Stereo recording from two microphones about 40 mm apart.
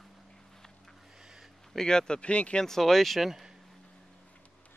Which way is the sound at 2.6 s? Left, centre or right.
Centre.